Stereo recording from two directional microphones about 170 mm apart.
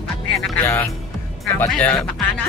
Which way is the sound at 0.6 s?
10° left (ahead or behind).